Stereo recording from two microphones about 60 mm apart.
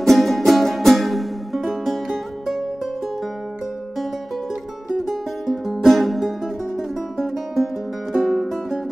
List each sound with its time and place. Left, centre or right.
0.0 s music: centre
4.9 s music: centre